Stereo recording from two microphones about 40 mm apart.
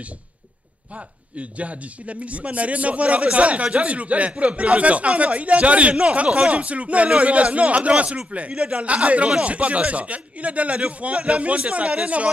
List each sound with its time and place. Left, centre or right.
0.9 s speech: right